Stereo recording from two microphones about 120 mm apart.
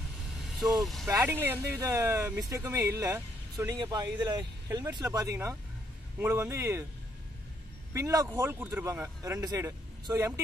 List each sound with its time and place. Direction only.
0.4 s vehicle: centre (ahead or behind)
1.0 s speech: 20° right (ahead or behind)
7.9 s speech: 30° right (ahead or behind)